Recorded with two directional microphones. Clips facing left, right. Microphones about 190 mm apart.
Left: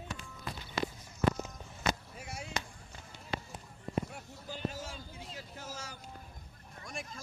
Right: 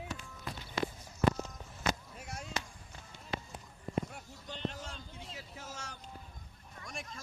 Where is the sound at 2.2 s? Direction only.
5° left (ahead or behind).